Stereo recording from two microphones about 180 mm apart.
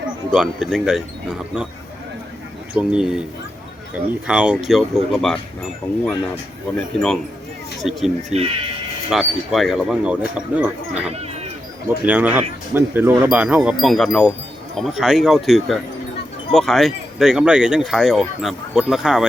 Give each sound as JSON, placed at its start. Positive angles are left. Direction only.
{"t": 0.3, "sound": "speech", "side_deg": -5}
{"t": 2.7, "sound": "speech", "side_deg": -5}
{"t": 6.9, "sound": "speech", "side_deg": 5}
{"t": 8.3, "sound": "speech", "side_deg": -35}
{"t": 9.0, "sound": "speech", "side_deg": 0}
{"t": 12.0, "sound": "speech", "side_deg": -10}